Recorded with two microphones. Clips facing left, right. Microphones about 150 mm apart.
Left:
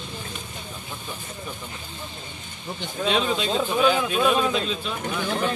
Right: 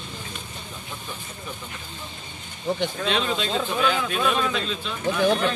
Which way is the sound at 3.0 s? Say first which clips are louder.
Left 5 dB; 5° left (ahead or behind).